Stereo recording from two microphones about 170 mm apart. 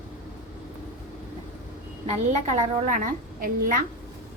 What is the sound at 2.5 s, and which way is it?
A woman's voice, 50° right (ahead or behind).